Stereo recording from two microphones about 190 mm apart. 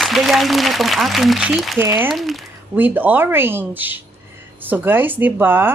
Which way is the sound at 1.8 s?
10° right (ahead or behind).